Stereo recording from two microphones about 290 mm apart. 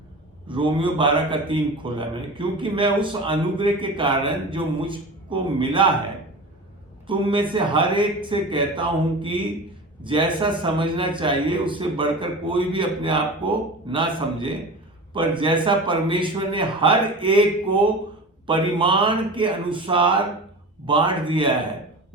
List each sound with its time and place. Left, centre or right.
0.4 s a man's voice: centre
7.1 s a man's voice: centre